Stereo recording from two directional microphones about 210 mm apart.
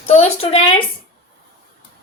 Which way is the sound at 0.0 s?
30° left (ahead or behind).